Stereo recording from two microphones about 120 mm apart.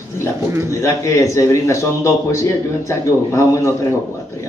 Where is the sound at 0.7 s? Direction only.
25° left (ahead or behind).